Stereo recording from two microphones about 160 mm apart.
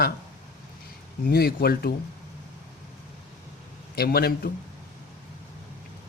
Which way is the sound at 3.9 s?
75° left (ahead or behind).